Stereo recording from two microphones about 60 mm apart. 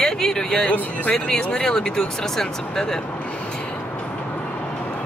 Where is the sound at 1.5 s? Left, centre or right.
Centre.